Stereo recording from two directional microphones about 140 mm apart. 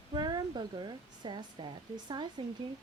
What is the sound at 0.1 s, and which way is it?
Speech, 30° right (ahead or behind).